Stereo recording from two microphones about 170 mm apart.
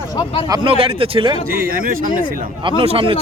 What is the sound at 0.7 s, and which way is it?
Speech, 35° right (ahead or behind).